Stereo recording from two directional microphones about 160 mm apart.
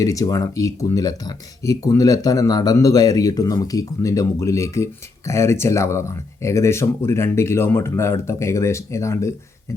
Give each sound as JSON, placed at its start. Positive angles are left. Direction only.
{"t": 0.0, "sound": "speech", "side_deg": 20}